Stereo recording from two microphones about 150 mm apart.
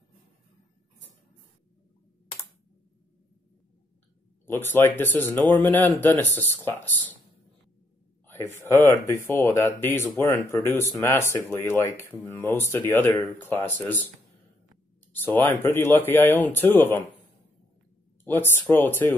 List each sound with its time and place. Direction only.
4.5 s speech: 15° left (ahead or behind)
8.3 s speech: 15° left (ahead or behind)
15.1 s speech: 15° left (ahead or behind)
18.2 s speech: 15° left (ahead or behind)